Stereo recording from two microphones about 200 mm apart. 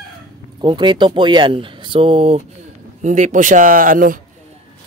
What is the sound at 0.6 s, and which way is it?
A man's voice, 25° right (ahead or behind).